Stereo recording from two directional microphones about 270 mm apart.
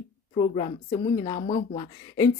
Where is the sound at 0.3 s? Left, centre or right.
Centre.